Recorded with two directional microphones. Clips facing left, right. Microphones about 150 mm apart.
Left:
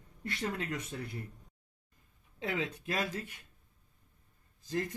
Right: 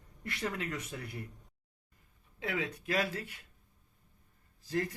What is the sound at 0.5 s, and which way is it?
Speech, 30° left (ahead or behind).